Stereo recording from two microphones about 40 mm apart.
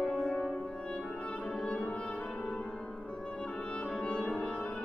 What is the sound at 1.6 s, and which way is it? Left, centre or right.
Music, left.